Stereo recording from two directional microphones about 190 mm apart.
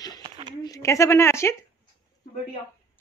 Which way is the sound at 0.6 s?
15° left (ahead or behind).